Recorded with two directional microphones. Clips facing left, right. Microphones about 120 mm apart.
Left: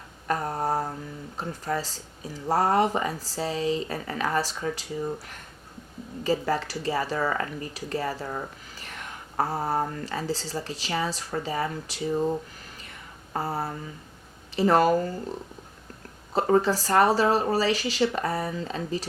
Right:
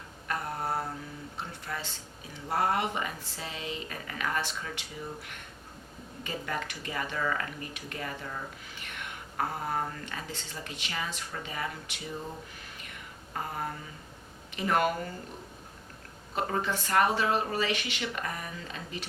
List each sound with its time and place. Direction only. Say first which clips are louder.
0.3 s mantra: left 6 dB; 40° left (ahead or behind)
1.4 s speech: left 9 dB; 40° left (ahead or behind)
12.8 s a sound: left 1 dB; 35° left (ahead or behind)
14.5 s speech: left 7 dB; 35° left (ahead or behind)
16.3 s speech: left 9 dB; 35° left (ahead or behind)